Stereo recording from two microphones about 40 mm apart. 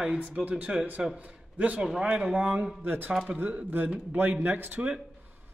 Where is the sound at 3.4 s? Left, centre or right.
Right.